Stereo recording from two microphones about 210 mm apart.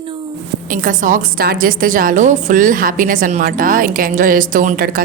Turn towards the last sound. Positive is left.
turn(degrees=-45)  # may be behind; listen again after turning